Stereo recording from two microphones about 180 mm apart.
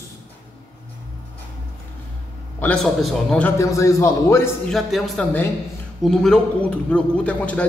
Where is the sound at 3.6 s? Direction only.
15° left (ahead or behind).